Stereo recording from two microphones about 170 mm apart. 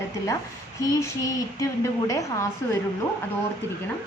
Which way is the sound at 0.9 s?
20° left (ahead or behind).